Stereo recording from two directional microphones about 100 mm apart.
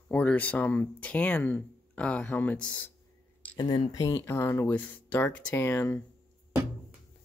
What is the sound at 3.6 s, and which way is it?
Speech, 45° left (ahead or behind).